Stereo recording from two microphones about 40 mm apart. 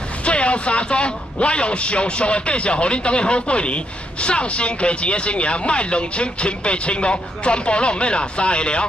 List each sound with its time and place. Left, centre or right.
0.2 s a man's voice: left